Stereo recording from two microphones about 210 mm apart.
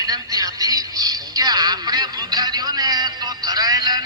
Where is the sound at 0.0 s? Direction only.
15° right (ahead or behind).